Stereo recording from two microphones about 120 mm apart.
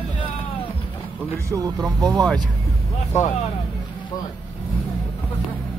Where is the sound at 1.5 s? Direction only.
30° right (ahead or behind).